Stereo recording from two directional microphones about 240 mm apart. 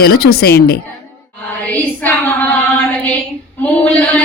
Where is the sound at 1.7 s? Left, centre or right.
Centre.